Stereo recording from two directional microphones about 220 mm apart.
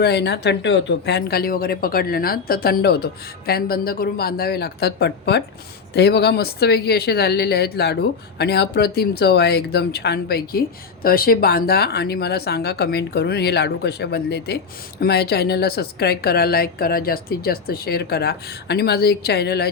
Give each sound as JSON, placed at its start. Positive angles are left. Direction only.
{"t": 0.0, "sound": "speech", "side_deg": 50}